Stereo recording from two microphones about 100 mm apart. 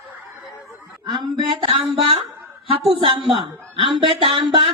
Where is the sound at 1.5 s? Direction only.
60° right (ahead or behind).